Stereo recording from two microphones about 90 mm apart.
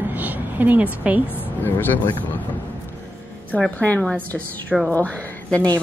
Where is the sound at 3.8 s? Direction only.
15° left (ahead or behind).